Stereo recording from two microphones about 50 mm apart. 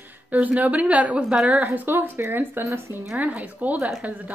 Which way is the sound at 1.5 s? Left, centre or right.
Right.